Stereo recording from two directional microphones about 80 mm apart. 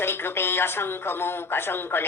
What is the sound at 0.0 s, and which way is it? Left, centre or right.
Speech, left.